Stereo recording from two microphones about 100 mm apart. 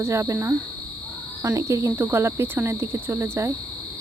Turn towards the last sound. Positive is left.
turn(degrees=-25)  # may be behind; listen again after turning